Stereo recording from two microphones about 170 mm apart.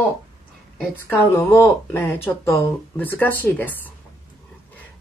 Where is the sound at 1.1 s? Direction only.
15° left (ahead or behind).